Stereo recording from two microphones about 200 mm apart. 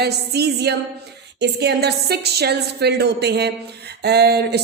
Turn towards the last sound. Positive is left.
turn(degrees=-55)  # may be behind; listen again after turning